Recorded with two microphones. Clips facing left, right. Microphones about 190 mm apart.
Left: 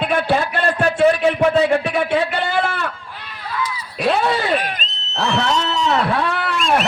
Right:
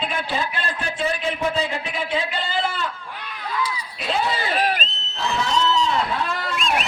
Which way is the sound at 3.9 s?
60° left (ahead or behind).